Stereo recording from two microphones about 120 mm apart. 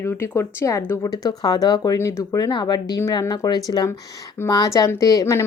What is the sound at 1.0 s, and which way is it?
A woman's voice, 30° left (ahead or behind).